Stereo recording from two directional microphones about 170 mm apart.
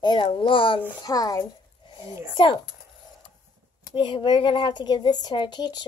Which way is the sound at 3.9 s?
25° left (ahead or behind).